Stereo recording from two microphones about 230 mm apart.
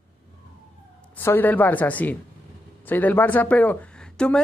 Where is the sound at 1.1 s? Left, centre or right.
Centre.